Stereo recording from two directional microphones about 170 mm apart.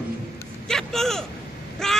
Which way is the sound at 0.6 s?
5° left (ahead or behind).